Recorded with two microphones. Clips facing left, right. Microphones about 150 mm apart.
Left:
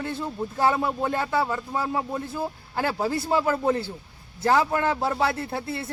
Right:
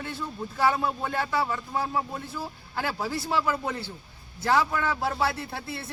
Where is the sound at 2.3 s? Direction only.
50° left (ahead or behind).